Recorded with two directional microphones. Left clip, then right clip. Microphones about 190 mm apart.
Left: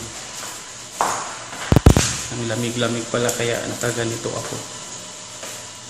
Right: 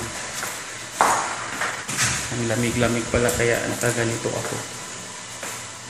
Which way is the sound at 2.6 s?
Centre (ahead or behind).